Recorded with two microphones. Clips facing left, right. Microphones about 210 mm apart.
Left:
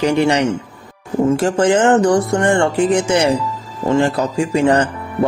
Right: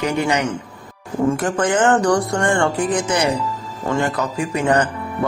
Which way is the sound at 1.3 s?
25° left (ahead or behind).